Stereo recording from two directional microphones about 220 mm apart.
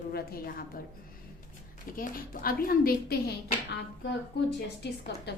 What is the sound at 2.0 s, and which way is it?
A woman's voice, 40° left (ahead or behind).